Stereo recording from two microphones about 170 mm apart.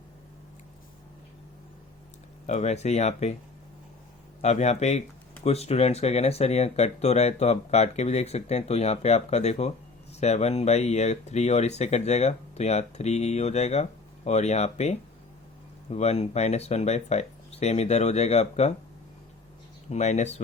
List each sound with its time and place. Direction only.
2.5 s speech: 40° left (ahead or behind)
4.4 s speech: 40° left (ahead or behind)
19.9 s speech: 40° left (ahead or behind)